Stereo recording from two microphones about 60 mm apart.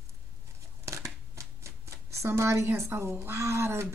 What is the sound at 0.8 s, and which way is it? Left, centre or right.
Speech, right.